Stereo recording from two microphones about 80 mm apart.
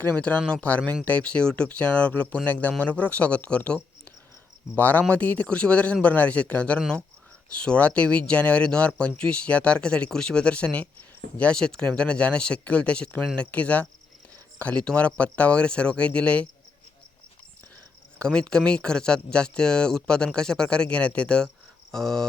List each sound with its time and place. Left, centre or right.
0.2 s speech: centre
18.2 s speech: centre